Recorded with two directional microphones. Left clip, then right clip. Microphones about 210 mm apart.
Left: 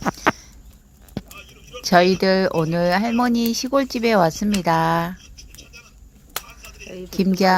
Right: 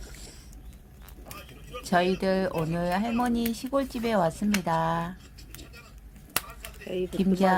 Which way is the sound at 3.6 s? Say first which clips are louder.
Left 10 dB; 30° left (ahead or behind).